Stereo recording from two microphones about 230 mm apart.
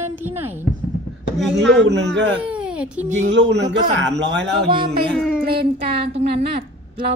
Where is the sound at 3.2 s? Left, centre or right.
Right.